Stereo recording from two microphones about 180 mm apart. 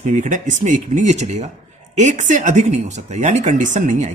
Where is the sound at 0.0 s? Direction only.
45° right (ahead or behind).